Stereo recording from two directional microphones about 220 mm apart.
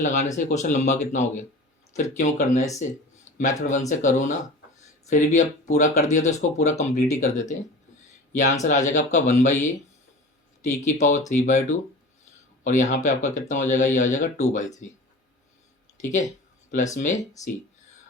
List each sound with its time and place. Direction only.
0.0 s speech: 35° left (ahead or behind)
3.3 s a sound: 35° left (ahead or behind)
3.6 s speech: 35° left (ahead or behind)
8.6 s speech: 35° left (ahead or behind)
12.6 s speech: 35° left (ahead or behind)
16.0 s speech: 35° left (ahead or behind)